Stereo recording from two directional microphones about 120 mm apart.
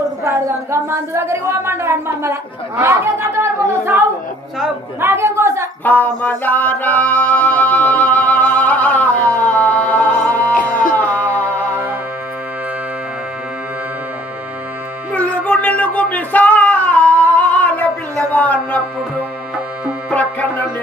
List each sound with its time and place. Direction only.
0.3 s a woman's voice: 25° right (ahead or behind)
4.9 s a woman's voice: 20° right (ahead or behind)
5.8 s music: 15° left (ahead or behind)
15.1 s music: 10° left (ahead or behind)